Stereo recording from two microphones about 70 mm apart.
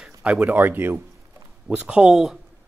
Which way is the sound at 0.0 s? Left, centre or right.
Centre.